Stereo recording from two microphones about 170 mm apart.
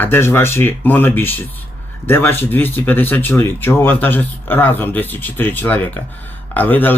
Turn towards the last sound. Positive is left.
turn(degrees=10)  # may be behind; listen again after turning